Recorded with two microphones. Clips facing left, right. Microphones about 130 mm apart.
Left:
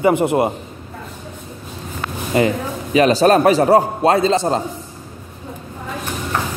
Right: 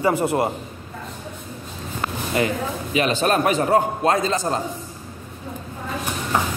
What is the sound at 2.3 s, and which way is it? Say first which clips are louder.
Speech: left 6 dB; 25° left (ahead or behind).